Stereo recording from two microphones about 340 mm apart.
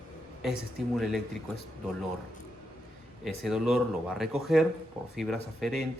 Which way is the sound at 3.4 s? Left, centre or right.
Centre.